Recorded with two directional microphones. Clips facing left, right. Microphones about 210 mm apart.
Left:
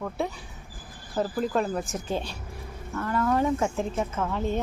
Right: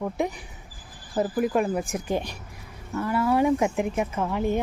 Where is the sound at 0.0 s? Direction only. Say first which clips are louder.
Right 3 dB; 15° right (ahead or behind).